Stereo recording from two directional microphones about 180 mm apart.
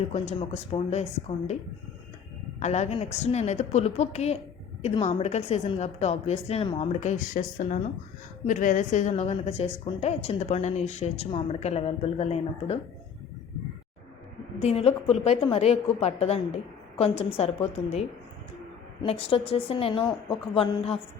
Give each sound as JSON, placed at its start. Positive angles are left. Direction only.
{"t": 0.1, "sound": "speech", "side_deg": 35}
{"t": 2.6, "sound": "speech", "side_deg": 40}
{"t": 8.4, "sound": "speech", "side_deg": 45}
{"t": 14.6, "sound": "speech", "side_deg": 35}
{"t": 19.0, "sound": "speech", "side_deg": 30}